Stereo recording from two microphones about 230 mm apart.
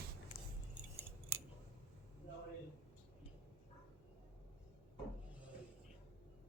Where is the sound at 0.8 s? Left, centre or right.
Right.